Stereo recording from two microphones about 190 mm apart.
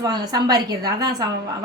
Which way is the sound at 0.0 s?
20° right (ahead or behind).